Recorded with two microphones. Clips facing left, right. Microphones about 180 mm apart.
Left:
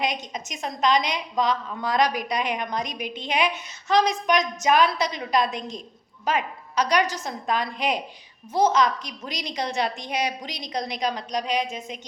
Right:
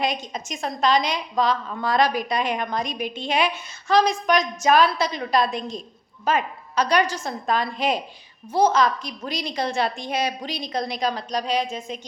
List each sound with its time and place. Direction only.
0.3 s a woman's voice: 20° left (ahead or behind)